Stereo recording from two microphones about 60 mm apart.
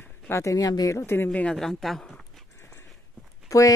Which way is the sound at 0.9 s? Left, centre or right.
Left.